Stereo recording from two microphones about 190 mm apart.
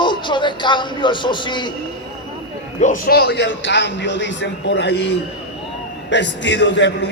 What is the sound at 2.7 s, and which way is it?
A man's voice, 40° left (ahead or behind).